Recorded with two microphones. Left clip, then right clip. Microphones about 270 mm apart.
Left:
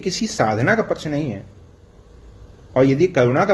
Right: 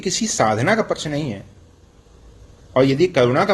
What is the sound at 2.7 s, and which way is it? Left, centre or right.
Speech, right.